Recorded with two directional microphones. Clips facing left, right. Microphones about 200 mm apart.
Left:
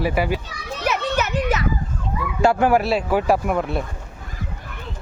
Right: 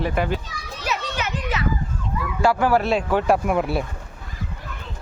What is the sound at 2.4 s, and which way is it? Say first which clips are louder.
Speech: left 2 dB; 20° left (ahead or behind).